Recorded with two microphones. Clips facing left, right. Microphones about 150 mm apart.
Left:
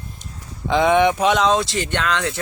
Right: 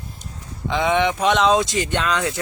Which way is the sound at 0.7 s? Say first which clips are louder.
Left 4 dB; 15° left (ahead or behind).